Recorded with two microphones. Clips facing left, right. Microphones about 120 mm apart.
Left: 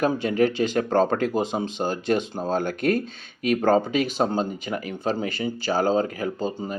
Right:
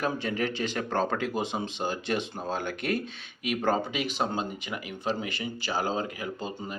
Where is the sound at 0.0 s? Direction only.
40° left (ahead or behind).